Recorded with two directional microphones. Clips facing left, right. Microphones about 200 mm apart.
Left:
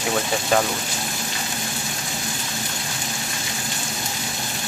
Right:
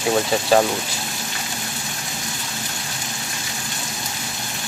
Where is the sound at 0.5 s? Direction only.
30° right (ahead or behind).